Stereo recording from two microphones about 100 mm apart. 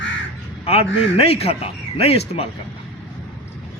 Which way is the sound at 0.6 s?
85° left.